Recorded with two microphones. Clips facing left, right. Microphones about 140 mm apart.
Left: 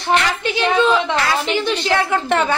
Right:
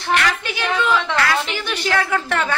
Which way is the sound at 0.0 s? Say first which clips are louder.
Left 2 dB; 20° left (ahead or behind).